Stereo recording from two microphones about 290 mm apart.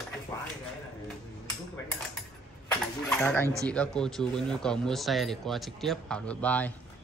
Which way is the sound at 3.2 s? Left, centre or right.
Centre.